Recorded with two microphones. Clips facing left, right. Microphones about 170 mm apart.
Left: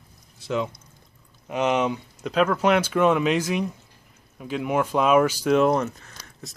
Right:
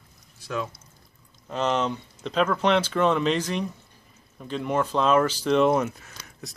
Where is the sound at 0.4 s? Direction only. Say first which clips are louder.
Left 4 dB; 20° left (ahead or behind).